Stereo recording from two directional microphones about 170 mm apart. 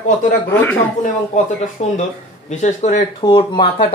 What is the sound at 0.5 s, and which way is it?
Speech, 10° left (ahead or behind).